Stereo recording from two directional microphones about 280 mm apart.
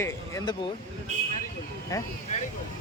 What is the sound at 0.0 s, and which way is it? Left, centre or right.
Speech, centre.